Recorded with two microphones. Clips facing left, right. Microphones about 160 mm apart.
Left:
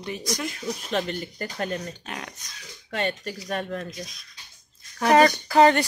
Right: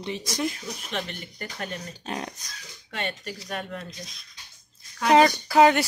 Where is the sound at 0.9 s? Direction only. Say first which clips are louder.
Left 6 dB; 40° left (ahead or behind).